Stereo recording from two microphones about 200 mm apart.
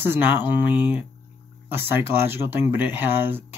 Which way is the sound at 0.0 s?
10° right (ahead or behind).